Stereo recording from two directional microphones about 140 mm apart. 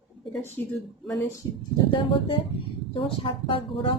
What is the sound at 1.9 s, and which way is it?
Speech, 40° left (ahead or behind).